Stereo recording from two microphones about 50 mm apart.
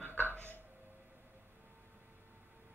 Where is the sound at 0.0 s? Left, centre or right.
Left.